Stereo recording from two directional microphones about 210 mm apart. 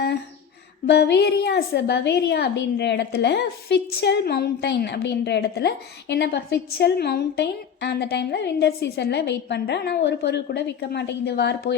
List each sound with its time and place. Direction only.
0.9 s a woman's voice: 55° left (ahead or behind)